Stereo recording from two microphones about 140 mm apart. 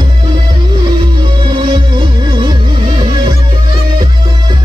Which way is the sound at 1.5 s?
35° right (ahead or behind).